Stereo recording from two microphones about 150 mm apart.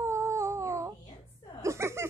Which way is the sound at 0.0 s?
20° right (ahead or behind).